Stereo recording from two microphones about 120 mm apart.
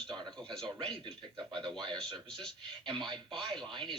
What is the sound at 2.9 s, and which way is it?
Speech, 40° right (ahead or behind).